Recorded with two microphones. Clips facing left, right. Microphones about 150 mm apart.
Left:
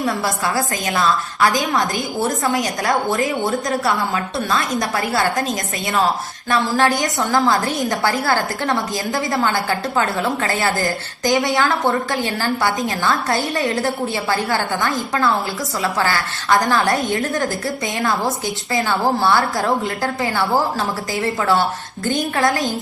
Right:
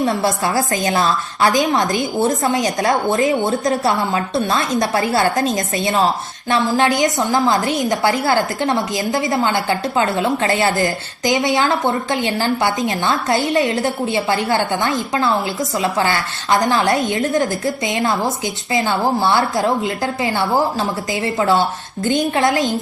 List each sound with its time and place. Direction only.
0.1 s a woman's voice: 25° right (ahead or behind)
6.5 s a woman's voice: 20° right (ahead or behind)